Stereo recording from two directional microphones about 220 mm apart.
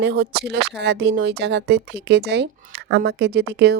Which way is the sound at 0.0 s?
50° right (ahead or behind).